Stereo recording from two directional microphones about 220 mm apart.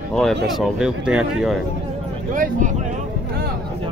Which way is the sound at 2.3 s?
35° right (ahead or behind).